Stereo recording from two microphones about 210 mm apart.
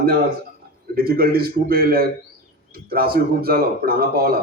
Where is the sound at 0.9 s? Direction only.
45° right (ahead or behind).